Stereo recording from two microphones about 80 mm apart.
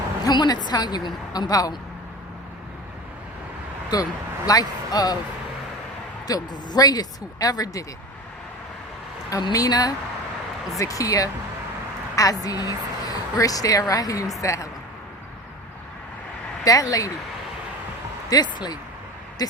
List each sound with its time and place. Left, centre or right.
0.3 s a woman's voice: left
3.9 s a woman's voice: left
6.2 s speech: left
9.5 s a woman's voice: left
16.6 s speech: left
18.3 s a woman's voice: left
19.4 s speech: left